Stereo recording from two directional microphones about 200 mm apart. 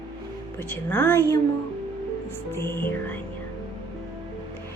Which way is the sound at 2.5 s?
10° left (ahead or behind).